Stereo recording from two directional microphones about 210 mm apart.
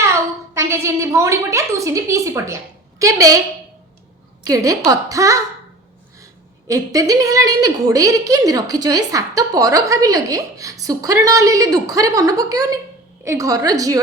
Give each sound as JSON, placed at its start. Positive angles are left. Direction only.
{"t": 0.0, "sound": "a woman's voice", "side_deg": -15}
{"t": 4.4, "sound": "a woman's voice", "side_deg": -15}
{"t": 6.7, "sound": "a woman's voice", "side_deg": -15}